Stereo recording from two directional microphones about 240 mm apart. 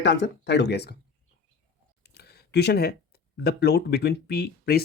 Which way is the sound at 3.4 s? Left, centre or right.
Left.